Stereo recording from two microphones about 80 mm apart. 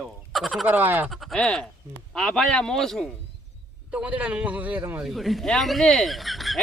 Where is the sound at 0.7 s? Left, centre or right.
Right.